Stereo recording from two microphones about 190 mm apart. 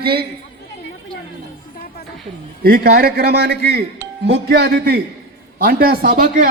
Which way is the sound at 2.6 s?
50° right (ahead or behind).